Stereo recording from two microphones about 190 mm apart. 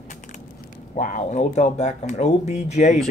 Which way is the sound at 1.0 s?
40° left (ahead or behind).